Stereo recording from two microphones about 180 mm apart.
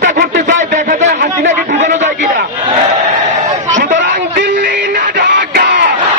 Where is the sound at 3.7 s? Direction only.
45° right (ahead or behind).